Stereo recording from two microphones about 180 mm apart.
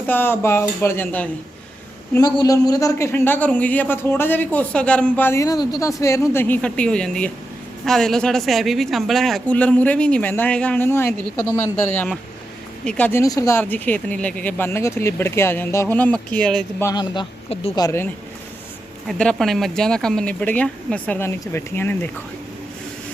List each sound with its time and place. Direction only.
0.1 s a man's voice: 10° left (ahead or behind)
2.1 s a man's voice: 20° left (ahead or behind)
16.8 s a man's voice: 25° left (ahead or behind)
17.8 s a man's voice: 15° left (ahead or behind)
19.0 s speech: 5° left (ahead or behind)